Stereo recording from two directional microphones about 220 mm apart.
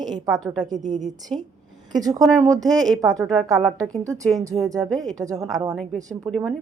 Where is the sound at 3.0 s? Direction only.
15° right (ahead or behind).